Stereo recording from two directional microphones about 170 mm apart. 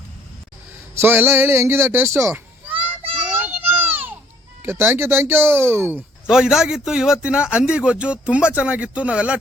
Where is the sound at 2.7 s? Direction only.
35° right (ahead or behind).